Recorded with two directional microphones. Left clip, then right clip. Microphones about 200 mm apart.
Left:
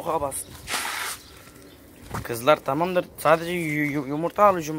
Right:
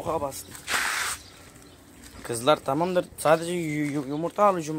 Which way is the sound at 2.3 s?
10° right (ahead or behind).